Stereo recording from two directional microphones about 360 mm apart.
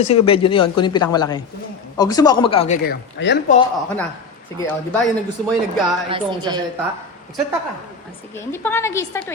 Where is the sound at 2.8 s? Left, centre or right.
Left.